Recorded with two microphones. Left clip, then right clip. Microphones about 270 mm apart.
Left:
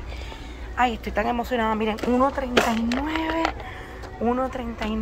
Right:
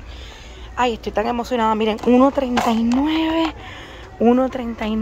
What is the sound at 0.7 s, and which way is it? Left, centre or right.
Speech, right.